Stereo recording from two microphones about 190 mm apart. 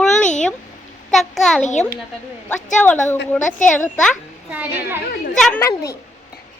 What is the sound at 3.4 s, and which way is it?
Speech, 40° left (ahead or behind).